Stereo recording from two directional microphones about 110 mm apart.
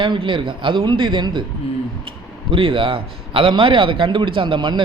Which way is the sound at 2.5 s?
55° right (ahead or behind).